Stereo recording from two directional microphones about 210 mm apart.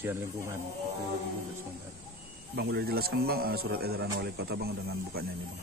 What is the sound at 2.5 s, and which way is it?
Speech, 50° right (ahead or behind).